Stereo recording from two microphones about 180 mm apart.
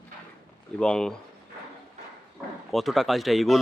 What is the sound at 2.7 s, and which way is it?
Speech, centre (ahead or behind).